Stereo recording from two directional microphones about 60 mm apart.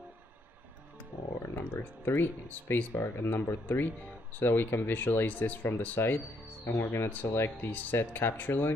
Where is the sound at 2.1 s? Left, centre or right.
Left.